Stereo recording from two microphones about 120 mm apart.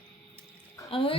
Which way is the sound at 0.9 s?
50° left (ahead or behind).